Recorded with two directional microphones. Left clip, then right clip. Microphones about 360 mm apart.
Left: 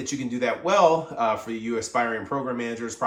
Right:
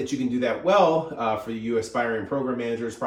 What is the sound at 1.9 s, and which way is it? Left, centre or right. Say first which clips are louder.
Speech: left 3 dB; left.